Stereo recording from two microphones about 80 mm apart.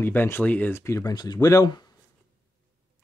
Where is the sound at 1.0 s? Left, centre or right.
Left.